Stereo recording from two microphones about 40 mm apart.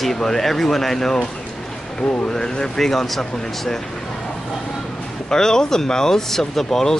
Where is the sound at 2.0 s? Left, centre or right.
Left.